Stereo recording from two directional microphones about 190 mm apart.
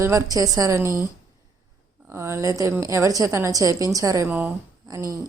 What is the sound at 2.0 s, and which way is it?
Speech, 15° right (ahead or behind).